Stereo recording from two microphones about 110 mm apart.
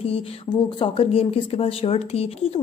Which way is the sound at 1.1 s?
60° left (ahead or behind).